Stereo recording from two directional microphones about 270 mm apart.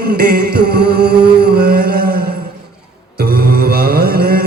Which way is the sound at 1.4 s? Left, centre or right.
Right.